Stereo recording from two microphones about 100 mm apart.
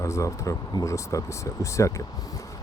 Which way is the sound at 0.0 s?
30° left (ahead or behind).